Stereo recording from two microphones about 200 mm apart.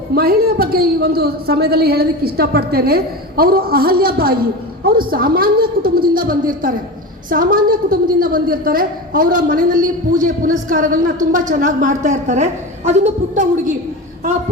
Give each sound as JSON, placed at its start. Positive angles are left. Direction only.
{"t": 0.1, "sound": "a woman's voice", "side_deg": -50}